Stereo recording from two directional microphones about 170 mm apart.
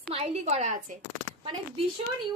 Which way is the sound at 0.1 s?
40° right (ahead or behind).